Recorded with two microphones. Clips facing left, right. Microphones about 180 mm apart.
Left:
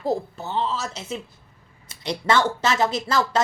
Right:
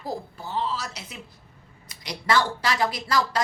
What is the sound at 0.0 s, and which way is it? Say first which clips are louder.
Speech: left 7 dB; 25° left (ahead or behind).